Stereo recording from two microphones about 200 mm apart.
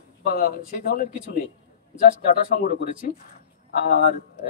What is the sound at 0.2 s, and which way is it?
Speech, 50° left (ahead or behind).